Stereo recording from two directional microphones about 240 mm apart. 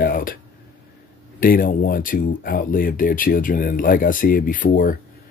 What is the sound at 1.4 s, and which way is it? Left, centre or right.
Speech, left.